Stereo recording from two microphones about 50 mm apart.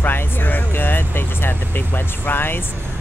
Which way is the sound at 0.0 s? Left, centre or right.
Left.